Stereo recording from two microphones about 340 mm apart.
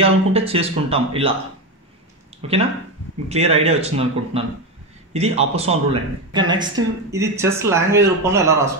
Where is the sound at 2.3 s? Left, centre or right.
Centre.